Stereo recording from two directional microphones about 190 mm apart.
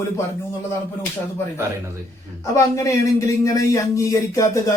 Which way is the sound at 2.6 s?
15° left (ahead or behind).